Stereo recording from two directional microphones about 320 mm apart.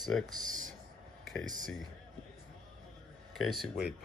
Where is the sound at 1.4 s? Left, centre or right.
Right.